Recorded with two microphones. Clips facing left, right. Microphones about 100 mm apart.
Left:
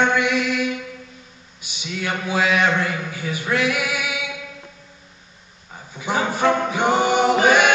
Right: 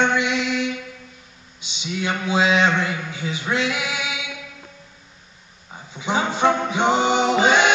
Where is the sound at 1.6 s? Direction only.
20° right (ahead or behind).